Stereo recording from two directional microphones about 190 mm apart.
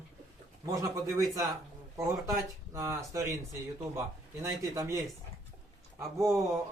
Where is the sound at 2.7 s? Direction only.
15° right (ahead or behind).